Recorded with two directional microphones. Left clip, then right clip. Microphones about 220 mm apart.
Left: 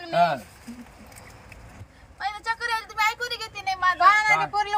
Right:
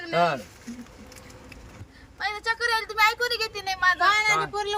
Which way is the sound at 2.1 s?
10° right (ahead or behind).